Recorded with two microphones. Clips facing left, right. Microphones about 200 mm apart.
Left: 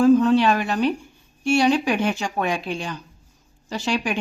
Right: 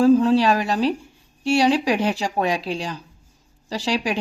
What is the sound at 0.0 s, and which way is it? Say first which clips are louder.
A woman's voice: even; 35° right (ahead or behind).